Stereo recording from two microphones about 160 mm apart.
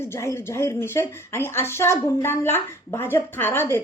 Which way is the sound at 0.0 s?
15° left (ahead or behind).